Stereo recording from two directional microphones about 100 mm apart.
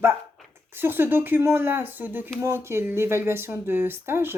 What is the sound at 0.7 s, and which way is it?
Speech, 20° right (ahead or behind).